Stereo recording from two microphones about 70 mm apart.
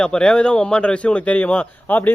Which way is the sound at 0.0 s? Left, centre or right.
Centre.